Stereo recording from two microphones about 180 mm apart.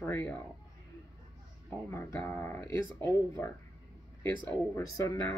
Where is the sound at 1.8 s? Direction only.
15° left (ahead or behind).